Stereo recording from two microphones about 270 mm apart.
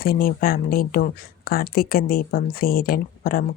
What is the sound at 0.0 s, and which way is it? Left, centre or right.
Speech, left.